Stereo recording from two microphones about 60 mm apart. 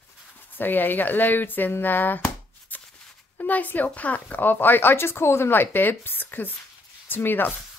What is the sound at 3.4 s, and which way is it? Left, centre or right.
Speech, left.